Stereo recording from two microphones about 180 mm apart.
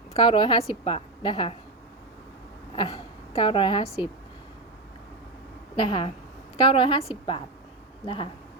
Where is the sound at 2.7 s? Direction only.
25° left (ahead or behind).